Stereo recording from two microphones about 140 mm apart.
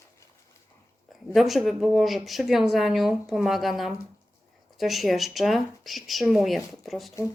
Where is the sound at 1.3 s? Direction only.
Centre (ahead or behind).